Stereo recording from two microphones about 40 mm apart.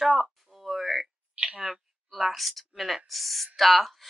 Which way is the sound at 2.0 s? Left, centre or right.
Centre.